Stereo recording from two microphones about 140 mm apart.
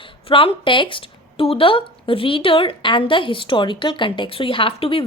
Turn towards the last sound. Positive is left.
turn(degrees=40)  # may be behind; listen again after turning